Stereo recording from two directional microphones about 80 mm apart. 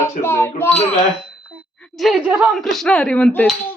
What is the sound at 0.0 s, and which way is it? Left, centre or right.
Speech, left.